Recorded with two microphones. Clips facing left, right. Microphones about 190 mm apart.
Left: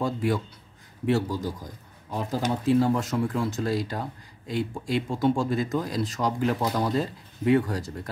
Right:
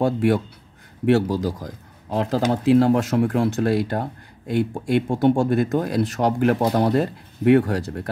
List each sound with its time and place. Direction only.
0.0 s speech: 65° right (ahead or behind)
1.0 s speech: 75° right (ahead or behind)